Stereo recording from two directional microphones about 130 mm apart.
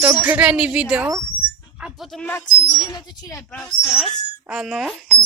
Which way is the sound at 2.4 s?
30° left (ahead or behind).